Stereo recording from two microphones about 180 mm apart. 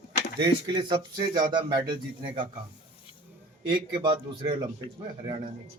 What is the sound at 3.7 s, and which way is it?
A man's voice, 25° right (ahead or behind).